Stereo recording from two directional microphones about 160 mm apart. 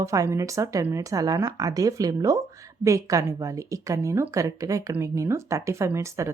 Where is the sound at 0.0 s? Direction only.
20° right (ahead or behind).